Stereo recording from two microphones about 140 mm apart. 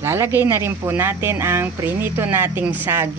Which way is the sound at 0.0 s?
15° right (ahead or behind).